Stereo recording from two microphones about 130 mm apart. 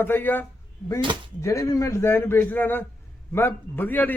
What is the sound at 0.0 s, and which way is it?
A man's voice, 15° left (ahead or behind).